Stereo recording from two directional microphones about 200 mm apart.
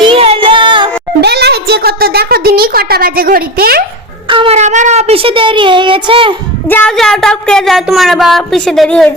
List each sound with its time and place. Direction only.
0.0 s music: 25° right (ahead or behind)
1.2 s a sound: 55° right (ahead or behind)
4.3 s a child's voice: 30° right (ahead or behind)
6.7 s speech: 5° left (ahead or behind)